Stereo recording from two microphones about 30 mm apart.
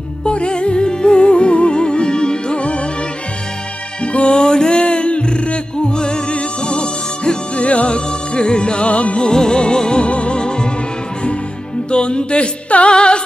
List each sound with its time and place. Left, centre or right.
0.2 s music: left
4.0 s music: left
4.4 s music: left
9.2 s music: left
11.9 s music: left